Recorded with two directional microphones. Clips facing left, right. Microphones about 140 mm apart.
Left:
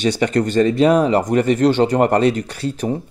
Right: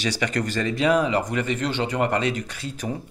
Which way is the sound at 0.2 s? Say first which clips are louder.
Left 11 dB; 35° left (ahead or behind).